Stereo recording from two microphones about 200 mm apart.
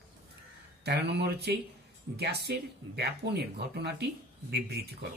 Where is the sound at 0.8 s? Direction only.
55° right (ahead or behind).